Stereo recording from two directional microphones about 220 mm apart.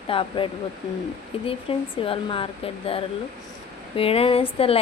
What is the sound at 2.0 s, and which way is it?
Speech, 25° left (ahead or behind).